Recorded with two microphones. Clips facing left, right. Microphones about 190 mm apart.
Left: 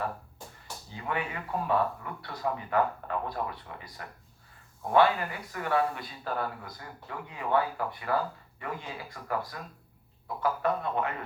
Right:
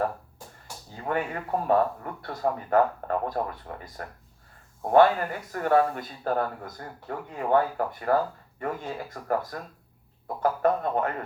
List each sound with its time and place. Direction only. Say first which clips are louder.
0.9 s speech: right 5 dB; 45° right (ahead or behind)